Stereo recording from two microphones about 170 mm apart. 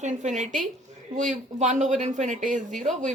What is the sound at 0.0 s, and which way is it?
A woman's voice, 45° right (ahead or behind).